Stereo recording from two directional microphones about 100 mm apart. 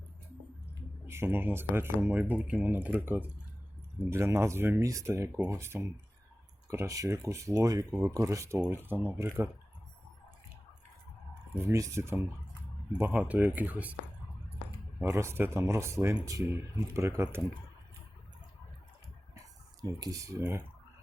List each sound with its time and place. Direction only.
1.0 s speech: 25° right (ahead or behind)
4.1 s speech: 30° right (ahead or behind)
11.5 s speech: 30° right (ahead or behind)
13.0 s speech: 15° right (ahead or behind)
15.1 s speech: 25° right (ahead or behind)
19.8 s speech: 35° right (ahead or behind)